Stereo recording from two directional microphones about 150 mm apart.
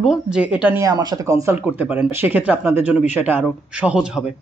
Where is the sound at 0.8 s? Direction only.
25° right (ahead or behind).